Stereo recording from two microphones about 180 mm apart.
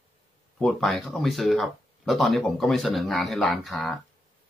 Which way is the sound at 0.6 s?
Centre (ahead or behind).